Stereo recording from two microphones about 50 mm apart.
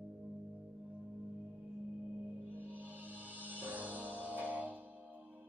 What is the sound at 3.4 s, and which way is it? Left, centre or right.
Music, right.